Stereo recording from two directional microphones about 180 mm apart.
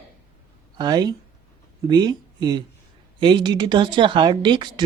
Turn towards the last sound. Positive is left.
turn(degrees=-25)  # may be behind; listen again after turning